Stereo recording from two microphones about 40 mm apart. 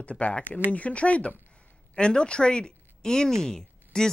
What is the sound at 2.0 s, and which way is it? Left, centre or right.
Speech, left.